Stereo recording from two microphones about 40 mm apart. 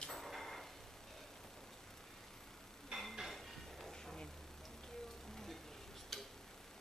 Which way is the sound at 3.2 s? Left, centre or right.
Centre.